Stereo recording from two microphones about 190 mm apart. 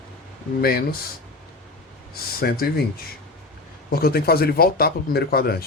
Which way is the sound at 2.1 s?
55° left (ahead or behind).